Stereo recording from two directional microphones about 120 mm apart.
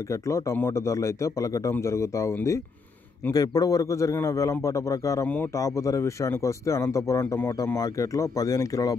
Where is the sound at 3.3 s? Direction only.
30° left (ahead or behind).